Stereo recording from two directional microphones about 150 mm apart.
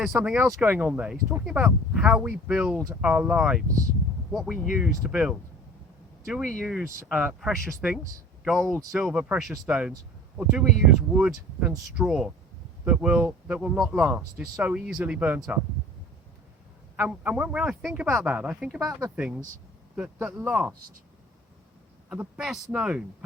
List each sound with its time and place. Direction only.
0.0 s speech: 5° right (ahead or behind)
4.5 s speech: 65° left (ahead or behind)
4.8 s speech: 5° right (ahead or behind)
6.8 s speech: 10° right (ahead or behind)
17.0 s speech: 5° right (ahead or behind)
20.0 s speech: 5° right (ahead or behind)
22.1 s speech: 5° right (ahead or behind)